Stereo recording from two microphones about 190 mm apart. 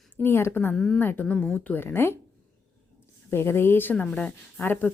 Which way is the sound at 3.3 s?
10° left (ahead or behind).